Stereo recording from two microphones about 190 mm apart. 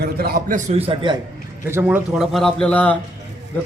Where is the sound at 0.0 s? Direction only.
55° right (ahead or behind); by 1.2 s 25° right (ahead or behind).